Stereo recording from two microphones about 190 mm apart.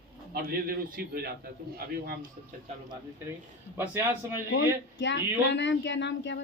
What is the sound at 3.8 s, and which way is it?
Speech, 10° right (ahead or behind).